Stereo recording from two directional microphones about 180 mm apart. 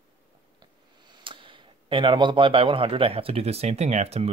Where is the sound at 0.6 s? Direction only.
25° right (ahead or behind).